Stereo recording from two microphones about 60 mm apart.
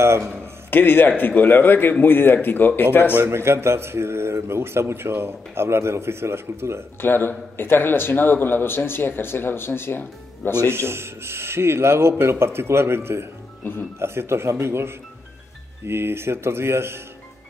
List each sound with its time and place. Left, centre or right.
0.7 s speech: left
3.3 s speech: right
7.0 s speech: left
10.7 s speech: right